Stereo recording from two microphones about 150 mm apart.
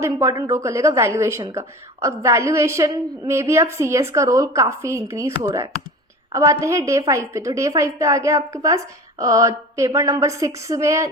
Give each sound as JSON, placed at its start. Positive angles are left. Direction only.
{"t": 0.0, "sound": "a woman's voice", "side_deg": -20}